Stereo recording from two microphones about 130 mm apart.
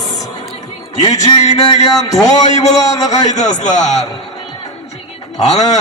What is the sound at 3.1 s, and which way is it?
Speech, 65° left (ahead or behind).